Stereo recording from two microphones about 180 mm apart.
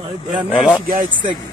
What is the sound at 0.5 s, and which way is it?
Speech, 5° right (ahead or behind).